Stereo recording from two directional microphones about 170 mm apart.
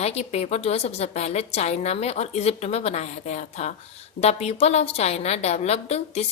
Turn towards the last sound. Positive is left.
turn(degrees=40)  # may be behind; listen again after turning